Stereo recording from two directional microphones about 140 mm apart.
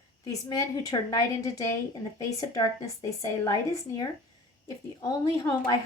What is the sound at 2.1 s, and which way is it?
A woman's voice, 25° left (ahead or behind).